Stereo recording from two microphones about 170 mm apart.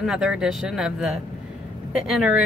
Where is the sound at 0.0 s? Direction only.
5° right (ahead or behind).